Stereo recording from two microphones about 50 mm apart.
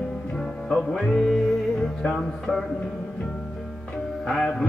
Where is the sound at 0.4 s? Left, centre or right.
Centre.